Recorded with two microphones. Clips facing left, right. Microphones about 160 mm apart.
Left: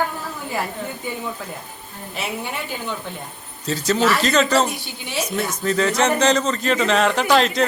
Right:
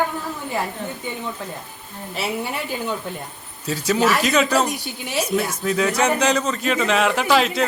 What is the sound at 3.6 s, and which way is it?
Speech, 10° right (ahead or behind).